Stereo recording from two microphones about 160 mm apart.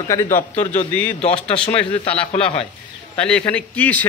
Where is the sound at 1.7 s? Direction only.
35° left (ahead or behind).